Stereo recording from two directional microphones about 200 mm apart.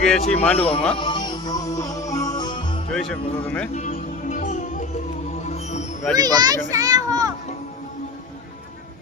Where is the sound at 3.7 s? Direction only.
40° left (ahead or behind).